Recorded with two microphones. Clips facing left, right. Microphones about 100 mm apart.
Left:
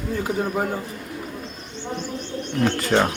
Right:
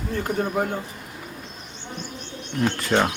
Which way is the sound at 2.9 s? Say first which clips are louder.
Left 1 dB; 15° left (ahead or behind).